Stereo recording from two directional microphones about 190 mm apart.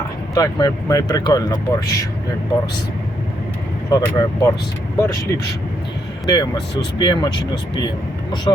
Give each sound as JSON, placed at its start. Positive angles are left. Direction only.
{"t": 0.3, "sound": "speech", "side_deg": 20}
{"t": 3.8, "sound": "speech", "side_deg": 20}